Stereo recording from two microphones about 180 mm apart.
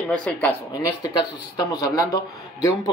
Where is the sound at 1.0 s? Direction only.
20° left (ahead or behind).